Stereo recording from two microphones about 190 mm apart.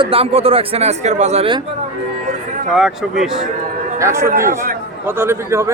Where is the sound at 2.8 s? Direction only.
5° right (ahead or behind).